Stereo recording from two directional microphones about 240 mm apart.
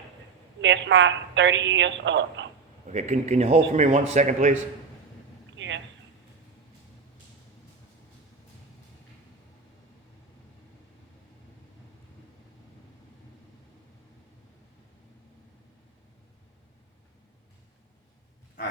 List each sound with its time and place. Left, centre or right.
0.6 s a woman's voice: right
2.8 s a man's voice: right
5.5 s a sound: right